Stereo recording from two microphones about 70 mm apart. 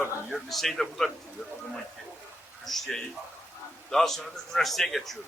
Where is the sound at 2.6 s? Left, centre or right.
Centre.